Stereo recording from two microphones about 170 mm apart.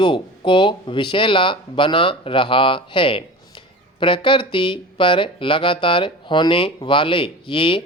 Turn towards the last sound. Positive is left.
turn(degrees=30)  # may be behind; listen again after turning